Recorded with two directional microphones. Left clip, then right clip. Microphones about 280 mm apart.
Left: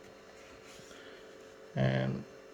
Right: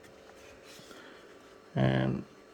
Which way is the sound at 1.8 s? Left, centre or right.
Right.